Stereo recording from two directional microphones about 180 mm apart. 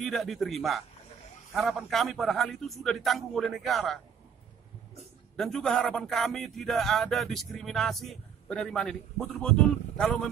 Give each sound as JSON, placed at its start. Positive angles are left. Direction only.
{"t": 0.0, "sound": "speech", "side_deg": 0}
{"t": 5.3, "sound": "speech", "side_deg": 0}